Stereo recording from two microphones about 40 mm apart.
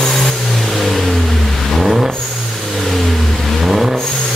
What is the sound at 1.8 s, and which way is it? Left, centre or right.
Vehicle, centre.